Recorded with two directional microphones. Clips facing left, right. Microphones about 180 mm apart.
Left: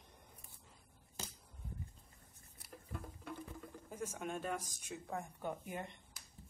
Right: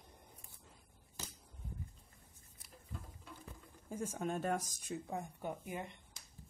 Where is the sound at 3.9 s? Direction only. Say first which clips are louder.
Right 4 dB; 35° right (ahead or behind).